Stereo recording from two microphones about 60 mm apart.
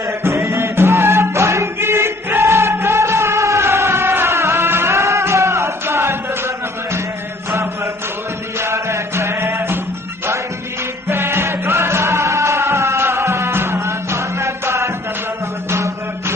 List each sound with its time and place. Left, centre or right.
0.2 s music: right
8.5 s music: right
11.1 s music: right